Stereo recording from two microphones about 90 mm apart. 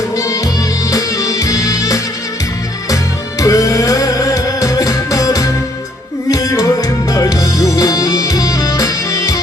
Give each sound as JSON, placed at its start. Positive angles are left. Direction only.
{"t": 0.2, "sound": "music", "side_deg": 40}